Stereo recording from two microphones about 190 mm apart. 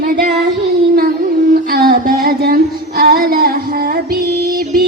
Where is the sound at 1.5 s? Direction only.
50° right (ahead or behind).